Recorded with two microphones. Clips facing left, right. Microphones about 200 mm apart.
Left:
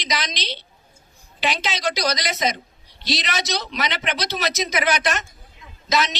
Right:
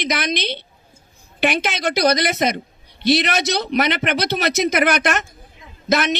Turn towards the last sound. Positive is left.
turn(degrees=-55)  # may be behind; listen again after turning